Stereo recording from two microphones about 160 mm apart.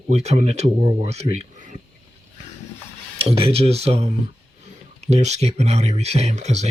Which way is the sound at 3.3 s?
35° right (ahead or behind).